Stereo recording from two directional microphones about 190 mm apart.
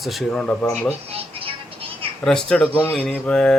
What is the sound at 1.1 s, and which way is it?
Vehicle, 30° right (ahead or behind).